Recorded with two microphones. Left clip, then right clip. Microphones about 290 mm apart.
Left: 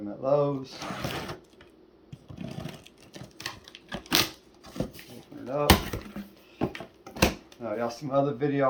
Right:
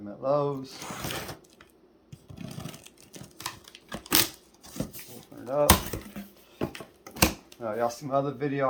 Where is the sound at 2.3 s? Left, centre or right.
Centre.